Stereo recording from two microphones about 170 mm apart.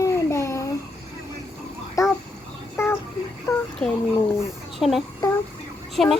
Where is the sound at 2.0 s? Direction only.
20° left (ahead or behind).